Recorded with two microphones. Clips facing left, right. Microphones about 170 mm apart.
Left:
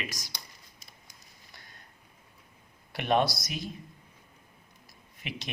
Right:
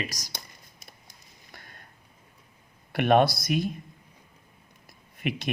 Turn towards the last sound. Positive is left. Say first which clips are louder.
# right 10 dB
turn(degrees=-55)  # may be behind; listen again after turning